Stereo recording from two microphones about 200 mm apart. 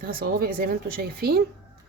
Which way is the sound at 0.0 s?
45° right (ahead or behind).